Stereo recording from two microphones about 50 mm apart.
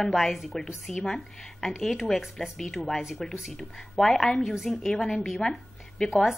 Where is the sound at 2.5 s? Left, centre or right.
Centre.